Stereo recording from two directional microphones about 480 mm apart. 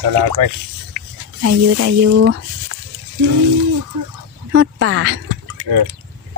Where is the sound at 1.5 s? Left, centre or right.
Right.